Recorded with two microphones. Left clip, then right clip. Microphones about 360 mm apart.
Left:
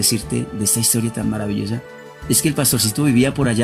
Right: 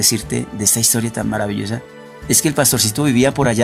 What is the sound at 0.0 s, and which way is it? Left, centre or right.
Speech, centre.